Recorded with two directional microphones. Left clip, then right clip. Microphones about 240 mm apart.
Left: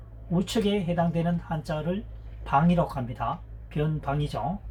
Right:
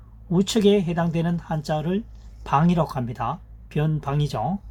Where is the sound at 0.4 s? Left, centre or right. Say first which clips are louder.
Right 8 dB; right.